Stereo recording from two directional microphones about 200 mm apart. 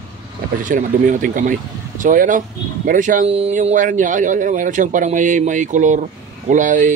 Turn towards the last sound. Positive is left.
turn(degrees=-40)  # may be behind; listen again after turning